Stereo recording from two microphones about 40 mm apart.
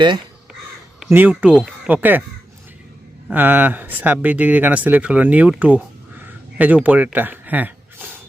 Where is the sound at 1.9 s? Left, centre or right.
Right.